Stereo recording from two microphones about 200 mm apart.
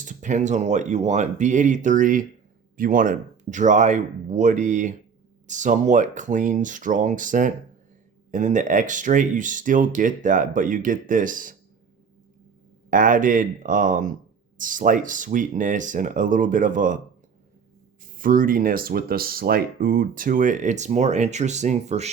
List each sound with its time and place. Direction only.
0.0 s speech: 40° right (ahead or behind)
12.9 s speech: 40° right (ahead or behind)
18.0 s speech: 45° right (ahead or behind)